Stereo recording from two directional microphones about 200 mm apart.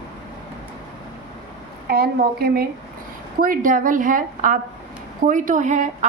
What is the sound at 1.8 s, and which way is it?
A woman's voice, 50° right (ahead or behind).